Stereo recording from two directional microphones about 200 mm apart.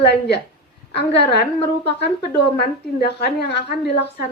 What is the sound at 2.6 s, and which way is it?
A woman's voice, 55° left (ahead or behind).